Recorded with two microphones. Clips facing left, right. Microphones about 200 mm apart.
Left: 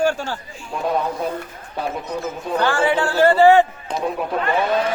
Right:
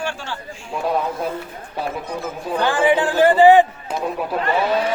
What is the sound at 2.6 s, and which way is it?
A man's voice, 15° right (ahead or behind).